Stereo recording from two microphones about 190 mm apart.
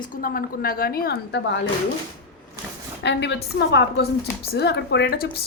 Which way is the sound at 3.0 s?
65° left (ahead or behind).